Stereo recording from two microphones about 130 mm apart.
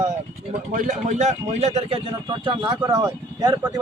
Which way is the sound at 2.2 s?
40° right (ahead or behind).